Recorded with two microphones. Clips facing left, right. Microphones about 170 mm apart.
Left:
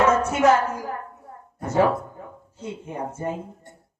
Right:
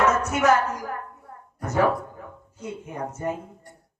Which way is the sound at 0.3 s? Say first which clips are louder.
Left 2 dB; 30° left (ahead or behind).